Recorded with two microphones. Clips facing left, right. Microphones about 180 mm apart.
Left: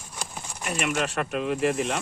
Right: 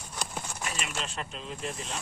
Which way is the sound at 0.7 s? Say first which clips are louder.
Left 14 dB; 60° left (ahead or behind).